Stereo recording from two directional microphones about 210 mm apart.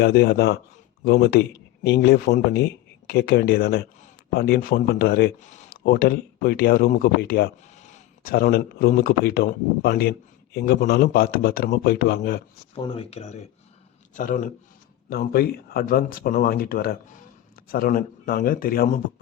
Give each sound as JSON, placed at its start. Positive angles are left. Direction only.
{"t": 0.0, "sound": "speech", "side_deg": 50}
{"t": 7.8, "sound": "speech", "side_deg": 35}
{"t": 12.7, "sound": "a man's voice", "side_deg": 25}